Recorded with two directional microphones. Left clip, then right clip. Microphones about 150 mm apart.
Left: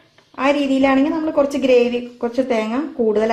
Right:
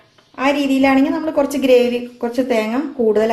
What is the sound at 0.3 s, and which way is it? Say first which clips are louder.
A woman's voice: even; 20° left (ahead or behind).